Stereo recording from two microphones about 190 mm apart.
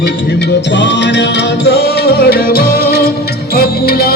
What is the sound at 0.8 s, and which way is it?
Music, 65° left (ahead or behind).